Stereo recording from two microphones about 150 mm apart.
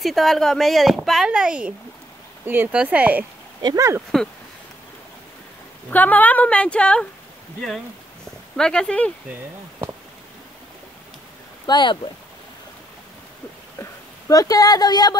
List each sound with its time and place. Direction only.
0.0 s speech: centre (ahead or behind)
3.6 s speech: 20° right (ahead or behind)
5.9 s speech: 10° left (ahead or behind)
8.5 s speech: 5° left (ahead or behind)
11.6 s speech: 30° left (ahead or behind)
13.7 s speech: 20° left (ahead or behind)